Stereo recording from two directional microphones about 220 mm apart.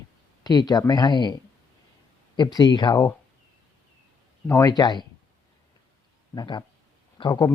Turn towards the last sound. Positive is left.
turn(degrees=15)  # may be behind; listen again after turning